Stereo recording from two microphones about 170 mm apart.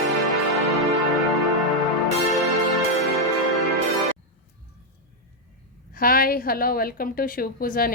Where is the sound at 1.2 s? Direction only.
Centre (ahead or behind).